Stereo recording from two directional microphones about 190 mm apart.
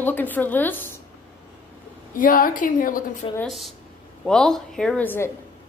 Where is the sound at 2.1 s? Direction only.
45° left (ahead or behind).